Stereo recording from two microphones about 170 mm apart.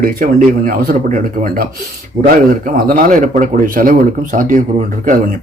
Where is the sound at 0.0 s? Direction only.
55° right (ahead or behind).